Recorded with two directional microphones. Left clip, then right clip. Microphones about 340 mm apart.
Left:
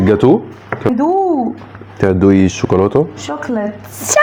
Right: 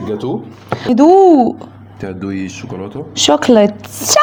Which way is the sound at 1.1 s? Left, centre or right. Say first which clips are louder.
Right 9 dB; right.